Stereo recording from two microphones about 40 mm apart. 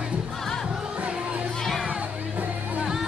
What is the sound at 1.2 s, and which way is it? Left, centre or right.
Music, right.